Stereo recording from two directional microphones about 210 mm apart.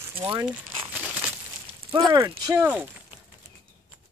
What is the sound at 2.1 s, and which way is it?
Speech, 20° right (ahead or behind).